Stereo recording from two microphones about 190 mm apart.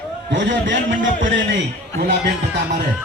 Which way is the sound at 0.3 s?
75° right (ahead or behind).